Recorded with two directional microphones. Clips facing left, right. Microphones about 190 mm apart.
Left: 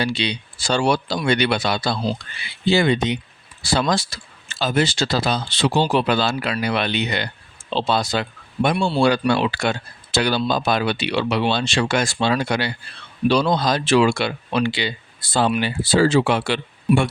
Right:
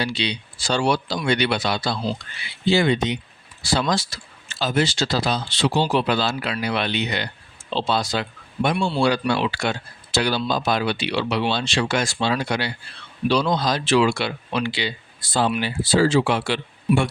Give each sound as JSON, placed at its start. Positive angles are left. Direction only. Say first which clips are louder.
{"t": 0.0, "sound": "speech", "louder": "left 2 dB", "side_deg": 50}
{"t": 8.7, "sound": "speech", "louder": "left 2 dB", "side_deg": 40}